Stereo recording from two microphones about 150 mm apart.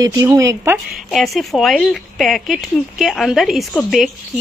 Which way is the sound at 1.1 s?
Centre (ahead or behind).